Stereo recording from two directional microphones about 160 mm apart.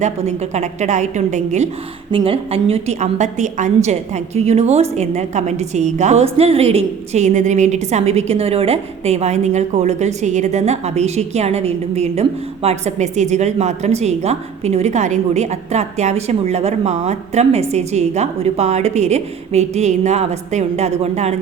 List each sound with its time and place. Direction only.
0.0 s a woman's voice: 45° right (ahead or behind)
2.1 s a woman's voice: 35° right (ahead or behind)